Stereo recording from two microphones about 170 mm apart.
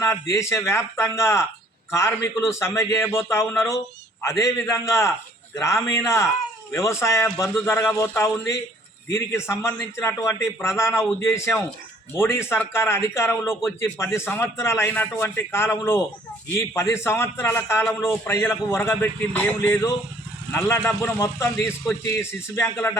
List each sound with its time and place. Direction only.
0.0 s a man's voice: 15° left (ahead or behind)